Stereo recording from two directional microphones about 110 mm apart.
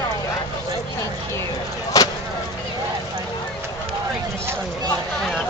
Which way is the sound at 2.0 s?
30° left (ahead or behind).